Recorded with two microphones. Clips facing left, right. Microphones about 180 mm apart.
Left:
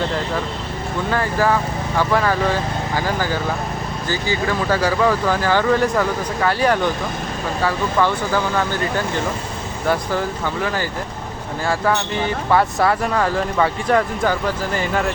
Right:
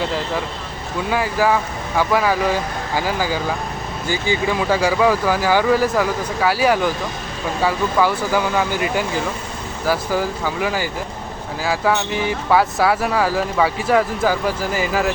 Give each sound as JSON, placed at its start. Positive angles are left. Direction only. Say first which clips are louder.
{"t": 1.1, "sound": "speech", "louder": "right 1 dB", "side_deg": -10}